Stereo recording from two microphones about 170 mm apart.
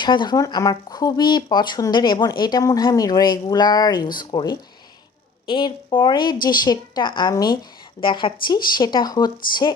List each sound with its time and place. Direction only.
0.0 s speech: 25° left (ahead or behind)